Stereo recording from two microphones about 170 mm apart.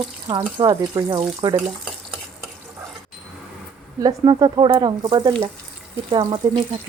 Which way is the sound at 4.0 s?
25° right (ahead or behind).